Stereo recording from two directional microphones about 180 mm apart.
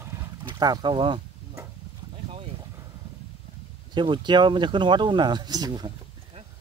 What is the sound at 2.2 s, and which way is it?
Boat, 30° right (ahead or behind).